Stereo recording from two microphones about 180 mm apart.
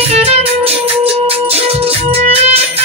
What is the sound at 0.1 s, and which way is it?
Music, 35° right (ahead or behind).